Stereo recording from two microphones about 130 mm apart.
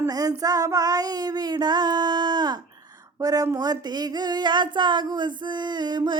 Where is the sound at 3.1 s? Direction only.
25° right (ahead or behind).